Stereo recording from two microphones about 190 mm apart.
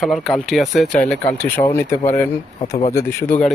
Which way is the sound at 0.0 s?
Centre (ahead or behind).